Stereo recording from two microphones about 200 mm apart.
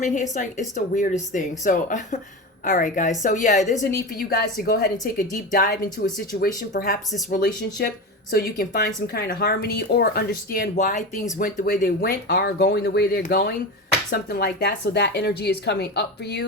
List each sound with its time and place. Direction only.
0.0 s a woman's voice: 40° left (ahead or behind); by 16.5 s 55° left (ahead or behind)